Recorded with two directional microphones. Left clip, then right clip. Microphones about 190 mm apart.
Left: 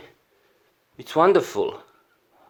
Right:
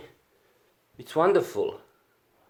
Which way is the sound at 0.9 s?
35° left (ahead or behind).